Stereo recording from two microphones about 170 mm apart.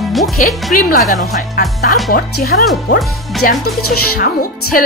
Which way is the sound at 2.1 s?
65° left (ahead or behind).